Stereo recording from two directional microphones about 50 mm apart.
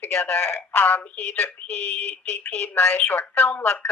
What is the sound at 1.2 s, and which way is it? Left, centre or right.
Speech, left.